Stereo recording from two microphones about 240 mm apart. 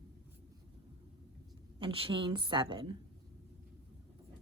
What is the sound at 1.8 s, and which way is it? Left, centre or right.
Speech, right.